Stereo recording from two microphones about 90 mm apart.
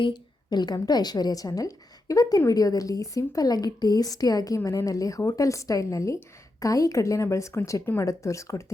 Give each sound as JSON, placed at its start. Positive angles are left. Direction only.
{"t": 0.0, "sound": "a woman's voice", "side_deg": 55}